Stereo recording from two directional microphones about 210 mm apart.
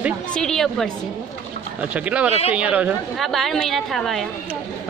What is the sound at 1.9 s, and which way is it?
A woman's voice, 5° right (ahead or behind).